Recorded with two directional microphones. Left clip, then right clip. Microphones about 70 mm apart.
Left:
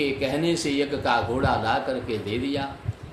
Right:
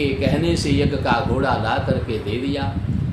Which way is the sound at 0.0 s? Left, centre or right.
Left.